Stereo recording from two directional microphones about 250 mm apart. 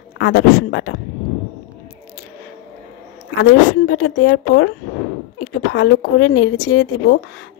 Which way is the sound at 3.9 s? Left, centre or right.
Left.